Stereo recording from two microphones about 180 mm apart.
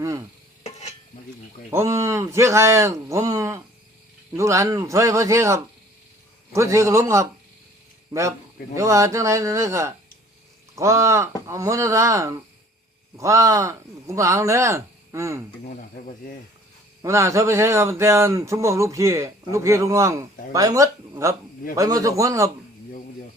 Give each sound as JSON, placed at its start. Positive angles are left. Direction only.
{"t": 0.6, "sound": "stir", "side_deg": 40}
{"t": 1.7, "sound": "a man's voice", "side_deg": -15}
{"t": 15.6, "sound": "speech", "side_deg": 50}
{"t": 17.0, "sound": "a man's voice", "side_deg": -15}